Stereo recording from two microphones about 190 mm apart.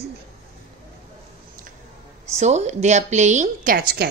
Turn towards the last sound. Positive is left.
turn(degrees=-50)  # may be behind; listen again after turning